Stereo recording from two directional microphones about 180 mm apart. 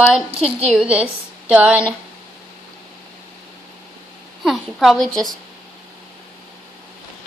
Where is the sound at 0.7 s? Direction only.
5° right (ahead or behind).